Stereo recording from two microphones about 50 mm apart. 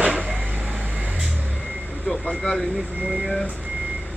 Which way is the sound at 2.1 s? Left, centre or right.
Centre.